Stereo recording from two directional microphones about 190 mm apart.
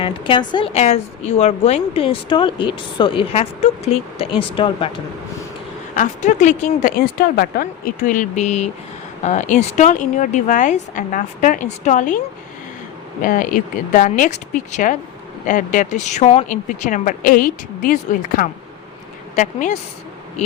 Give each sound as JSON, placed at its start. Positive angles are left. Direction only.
{"t": 0.0, "sound": "a woman's voice", "side_deg": 25}
{"t": 6.0, "sound": "a woman's voice", "side_deg": 40}
{"t": 13.2, "sound": "a woman's voice", "side_deg": 45}